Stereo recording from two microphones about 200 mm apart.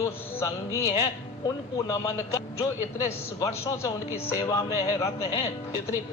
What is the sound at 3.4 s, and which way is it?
A man's voice, 15° left (ahead or behind).